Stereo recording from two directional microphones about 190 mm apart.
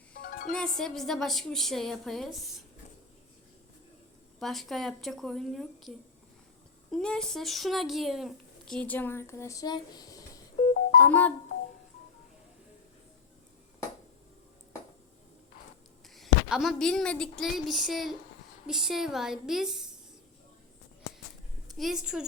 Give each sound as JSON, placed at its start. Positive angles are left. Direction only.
{"t": 0.1, "sound": "music", "side_deg": 50}
{"t": 0.5, "sound": "speech", "side_deg": 5}
{"t": 4.4, "sound": "speech", "side_deg": 0}
{"t": 6.9, "sound": "a child's voice", "side_deg": 5}
{"t": 16.0, "sound": "a woman's voice", "side_deg": 0}
{"t": 21.7, "sound": "speech", "side_deg": 0}